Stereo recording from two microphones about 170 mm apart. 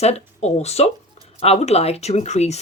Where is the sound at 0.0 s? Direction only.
40° left (ahead or behind).